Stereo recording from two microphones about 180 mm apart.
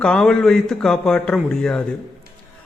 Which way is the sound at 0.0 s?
5° left (ahead or behind).